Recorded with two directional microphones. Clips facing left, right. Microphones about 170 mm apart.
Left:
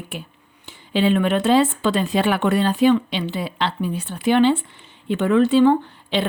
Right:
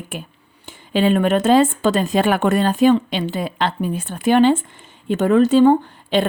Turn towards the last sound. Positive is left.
turn(degrees=-45)  # may be behind; listen again after turning